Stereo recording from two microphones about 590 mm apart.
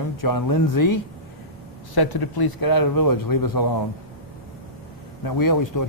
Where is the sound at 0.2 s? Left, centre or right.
Left.